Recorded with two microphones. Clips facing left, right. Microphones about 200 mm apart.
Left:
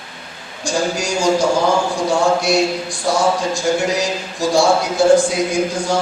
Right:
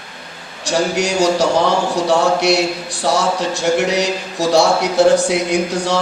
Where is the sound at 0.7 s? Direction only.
65° right (ahead or behind).